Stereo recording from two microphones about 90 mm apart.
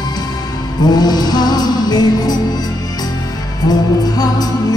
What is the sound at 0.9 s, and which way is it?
Music, 50° left (ahead or behind).